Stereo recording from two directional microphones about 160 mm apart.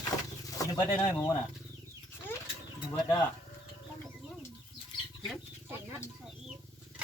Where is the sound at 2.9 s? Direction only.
20° left (ahead or behind).